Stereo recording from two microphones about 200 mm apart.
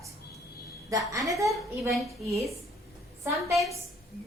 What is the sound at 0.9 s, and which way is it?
Speech, 15° right (ahead or behind).